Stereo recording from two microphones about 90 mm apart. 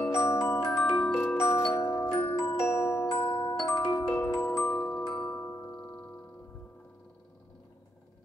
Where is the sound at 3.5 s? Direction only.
50° left (ahead or behind).